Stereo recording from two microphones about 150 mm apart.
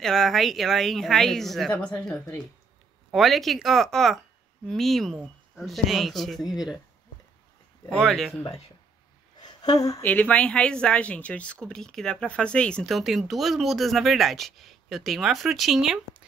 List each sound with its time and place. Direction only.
0.0 s speech: centre (ahead or behind)
8.0 s speech: centre (ahead or behind)
9.6 s speech: 25° left (ahead or behind)
10.0 s speech: 10° left (ahead or behind)